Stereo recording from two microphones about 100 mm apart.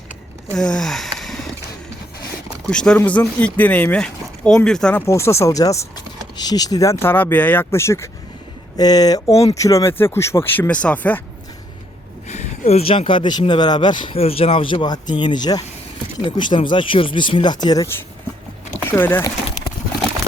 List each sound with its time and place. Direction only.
0.5 s a sound: 10° left (ahead or behind)
2.6 s speech: 10° left (ahead or behind)
5.0 s speech: 30° left (ahead or behind)
8.8 s speech: 40° left (ahead or behind)
9.3 s speech: 90° left
9.6 s speech: 35° left (ahead or behind); by 11.2 s 15° left (ahead or behind)
12.3 s speech: 90° left; by 14.2 s 55° left (ahead or behind)
14.2 s speech: 75° left (ahead or behind); by 15.6 s 45° left (ahead or behind)
16.2 s speech: 55° left (ahead or behind)
18.9 s speech: 20° left (ahead or behind)